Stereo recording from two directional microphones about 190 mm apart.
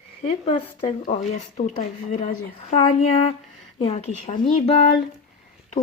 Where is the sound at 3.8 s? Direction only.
35° left (ahead or behind).